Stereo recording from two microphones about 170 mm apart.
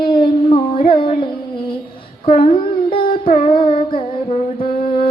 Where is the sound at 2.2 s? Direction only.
35° left (ahead or behind).